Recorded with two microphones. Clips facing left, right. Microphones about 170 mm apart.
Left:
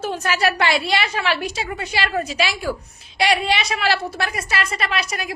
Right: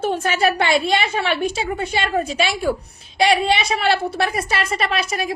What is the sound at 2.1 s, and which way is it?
A woman's voice, 25° right (ahead or behind).